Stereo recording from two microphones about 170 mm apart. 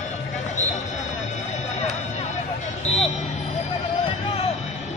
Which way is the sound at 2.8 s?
40° left (ahead or behind).